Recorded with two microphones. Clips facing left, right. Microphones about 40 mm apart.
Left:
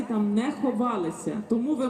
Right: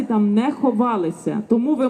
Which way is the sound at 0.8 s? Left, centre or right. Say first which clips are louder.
Right 7 dB; right.